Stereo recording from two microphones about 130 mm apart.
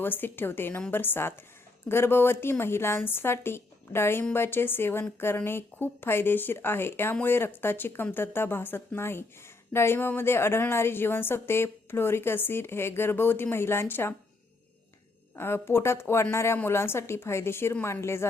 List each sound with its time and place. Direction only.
0.0 s a woman's voice: 15° left (ahead or behind)
15.4 s a woman's voice: 20° left (ahead or behind)